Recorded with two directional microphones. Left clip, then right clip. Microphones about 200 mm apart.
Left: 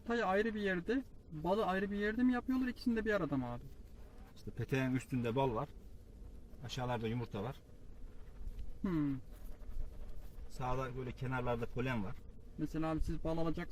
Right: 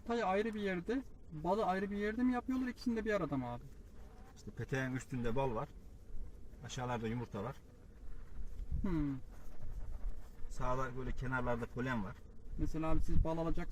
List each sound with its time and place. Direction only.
0.1 s a man's voice: centre (ahead or behind)
4.5 s a man's voice: 30° left (ahead or behind)
8.8 s a sound: centre (ahead or behind)
10.6 s a man's voice: 15° left (ahead or behind)
12.5 s a man's voice: 5° left (ahead or behind)